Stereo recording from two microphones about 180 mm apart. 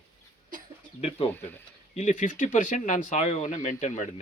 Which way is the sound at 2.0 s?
45° left (ahead or behind).